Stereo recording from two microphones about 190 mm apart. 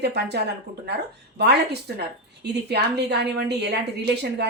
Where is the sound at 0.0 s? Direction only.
60° right (ahead or behind).